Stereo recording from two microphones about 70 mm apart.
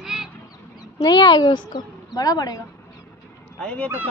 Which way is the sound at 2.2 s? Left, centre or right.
Left.